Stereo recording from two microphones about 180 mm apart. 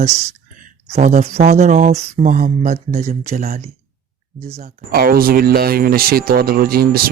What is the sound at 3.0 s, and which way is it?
Speech, 40° right (ahead or behind).